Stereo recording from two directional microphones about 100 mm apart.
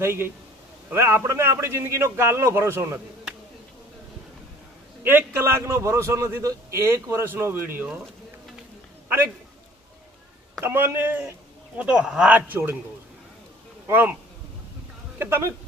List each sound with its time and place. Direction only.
0.0 s a man's voice: 25° right (ahead or behind)
5.0 s a man's voice: 20° right (ahead or behind)
9.0 s a man's voice: 20° right (ahead or behind)
10.6 s a man's voice: 20° right (ahead or behind)
12.4 s a man's voice: 20° right (ahead or behind)
13.8 s speech: 20° right (ahead or behind)
15.2 s a man's voice: 25° right (ahead or behind)